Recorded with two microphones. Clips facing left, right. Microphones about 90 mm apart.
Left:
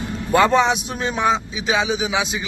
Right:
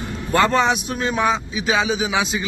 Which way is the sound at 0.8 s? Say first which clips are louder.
Even; 25° left (ahead or behind).